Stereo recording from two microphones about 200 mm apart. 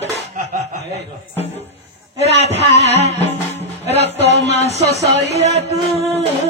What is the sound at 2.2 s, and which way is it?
Speech, 30° left (ahead or behind).